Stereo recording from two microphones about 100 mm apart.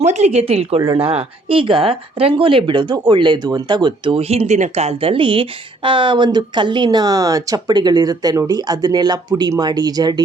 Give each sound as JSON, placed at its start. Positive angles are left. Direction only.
{"t": 0.3, "sound": "speech", "side_deg": -90}
{"t": 0.9, "sound": "speech", "side_deg": -70}
{"t": 4.2, "sound": "speech", "side_deg": -90}